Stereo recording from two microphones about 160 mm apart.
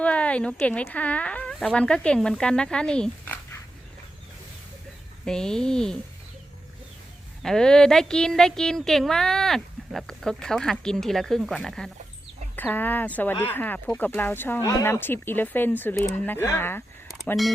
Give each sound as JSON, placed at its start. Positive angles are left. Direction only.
{"t": 0.0, "sound": "speech", "side_deg": 10}
{"t": 5.2, "sound": "speech", "side_deg": 5}
{"t": 7.4, "sound": "speech", "side_deg": 5}